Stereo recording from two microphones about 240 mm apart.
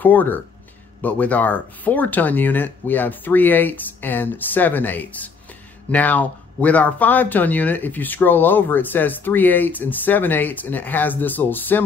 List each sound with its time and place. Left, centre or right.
0.0 s speech: centre